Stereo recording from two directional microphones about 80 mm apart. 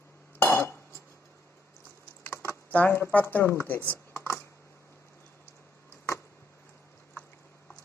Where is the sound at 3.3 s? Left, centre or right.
Left.